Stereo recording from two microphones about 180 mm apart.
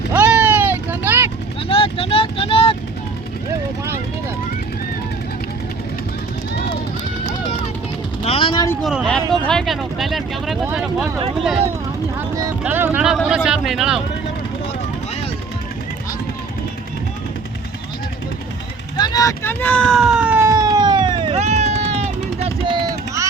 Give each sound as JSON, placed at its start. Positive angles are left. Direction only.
{"t": 0.1, "sound": "vehicle", "side_deg": -10}
{"t": 1.6, "sound": "vehicle", "side_deg": 30}
{"t": 8.2, "sound": "a sound", "side_deg": 30}
{"t": 8.8, "sound": "vehicle", "side_deg": 0}
{"t": 12.6, "sound": "speech", "side_deg": -10}
{"t": 18.9, "sound": "a sound", "side_deg": 20}